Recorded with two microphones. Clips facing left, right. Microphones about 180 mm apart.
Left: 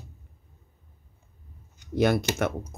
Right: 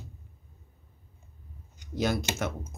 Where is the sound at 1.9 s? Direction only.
60° left (ahead or behind).